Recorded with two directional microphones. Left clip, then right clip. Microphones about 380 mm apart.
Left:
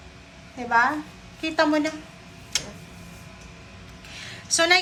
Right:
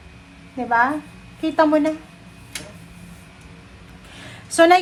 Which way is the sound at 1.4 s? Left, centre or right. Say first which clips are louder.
Right 5 dB; centre.